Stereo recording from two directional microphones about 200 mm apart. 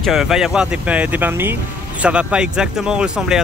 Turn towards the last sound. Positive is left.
turn(degrees=-5)  # may be behind; listen again after turning